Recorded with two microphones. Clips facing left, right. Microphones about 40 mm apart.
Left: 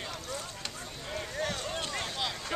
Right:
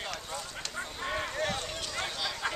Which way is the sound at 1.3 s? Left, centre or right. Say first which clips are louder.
Right 2 dB; centre.